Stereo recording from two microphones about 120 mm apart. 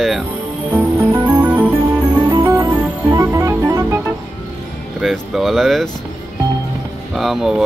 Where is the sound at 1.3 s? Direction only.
15° right (ahead or behind).